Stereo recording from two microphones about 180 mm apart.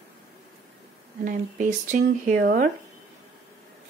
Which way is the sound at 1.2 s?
45° right (ahead or behind).